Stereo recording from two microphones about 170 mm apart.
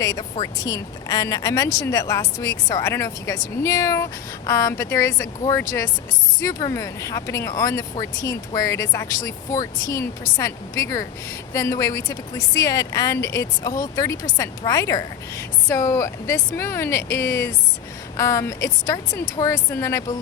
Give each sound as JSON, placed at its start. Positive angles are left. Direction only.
{"t": 0.0, "sound": "speech", "side_deg": 20}